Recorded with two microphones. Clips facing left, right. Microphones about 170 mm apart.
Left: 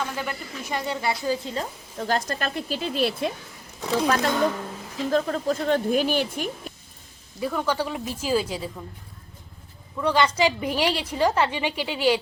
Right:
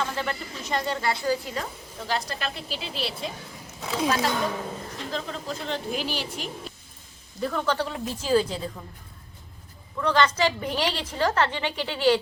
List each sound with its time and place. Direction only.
0.0 s a woman's voice: 10° left (ahead or behind)
2.0 s speech: 45° left (ahead or behind)
7.3 s a woman's voice: 10° left (ahead or behind)
10.0 s a woman's voice: 10° left (ahead or behind)